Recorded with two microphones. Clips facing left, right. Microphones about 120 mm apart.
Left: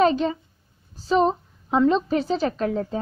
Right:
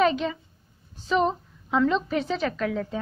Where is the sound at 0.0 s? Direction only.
35° left (ahead or behind).